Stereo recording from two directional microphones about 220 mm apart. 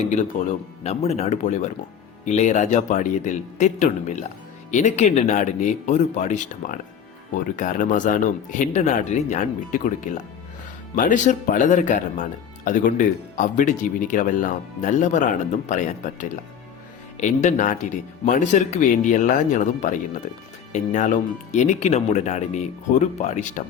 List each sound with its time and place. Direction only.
0.0 s speech: 35° left (ahead or behind)